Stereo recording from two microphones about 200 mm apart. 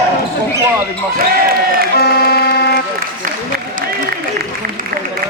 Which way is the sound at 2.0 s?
50° left (ahead or behind).